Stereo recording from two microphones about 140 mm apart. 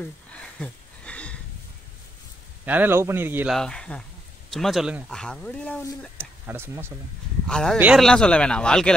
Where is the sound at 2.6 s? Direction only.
15° right (ahead or behind).